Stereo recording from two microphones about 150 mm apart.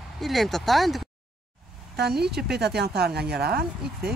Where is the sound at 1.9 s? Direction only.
90° right.